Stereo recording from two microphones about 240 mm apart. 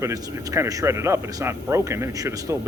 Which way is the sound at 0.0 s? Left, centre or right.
Centre.